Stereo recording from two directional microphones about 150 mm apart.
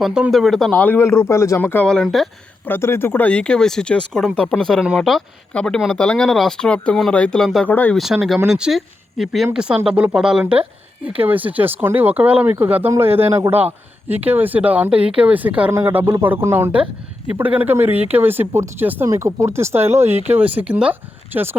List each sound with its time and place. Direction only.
0.0 s speech: 5° right (ahead or behind)
2.6 s speech: 15° left (ahead or behind)
7.9 s speech: centre (ahead or behind)